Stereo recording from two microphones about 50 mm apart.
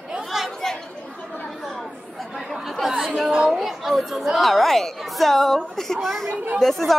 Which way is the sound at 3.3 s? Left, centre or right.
Centre.